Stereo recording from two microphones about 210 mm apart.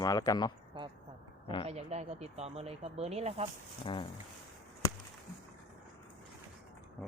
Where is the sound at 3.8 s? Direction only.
25° left (ahead or behind).